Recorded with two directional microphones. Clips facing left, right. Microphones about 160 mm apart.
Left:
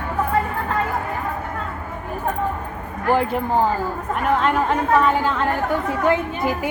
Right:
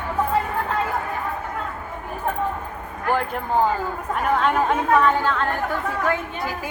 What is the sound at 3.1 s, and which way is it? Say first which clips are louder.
A woman's voice: left 4 dB; 10° left (ahead or behind).